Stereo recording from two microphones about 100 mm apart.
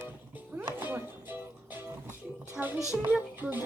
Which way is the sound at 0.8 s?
20° right (ahead or behind).